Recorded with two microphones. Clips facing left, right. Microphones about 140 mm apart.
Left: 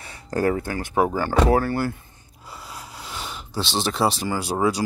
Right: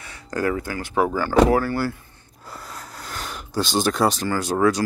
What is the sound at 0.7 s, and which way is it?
Speech, 25° left (ahead or behind).